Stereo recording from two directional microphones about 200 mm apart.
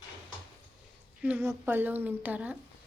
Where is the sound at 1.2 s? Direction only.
10° right (ahead or behind).